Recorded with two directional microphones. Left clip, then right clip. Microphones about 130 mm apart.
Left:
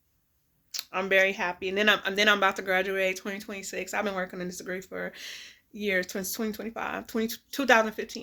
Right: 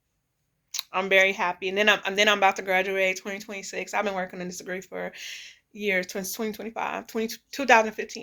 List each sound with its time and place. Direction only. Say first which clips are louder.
0.7 s speech: right 3 dB; 30° left (ahead or behind)